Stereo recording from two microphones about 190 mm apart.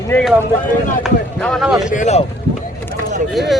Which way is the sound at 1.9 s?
40° left (ahead or behind).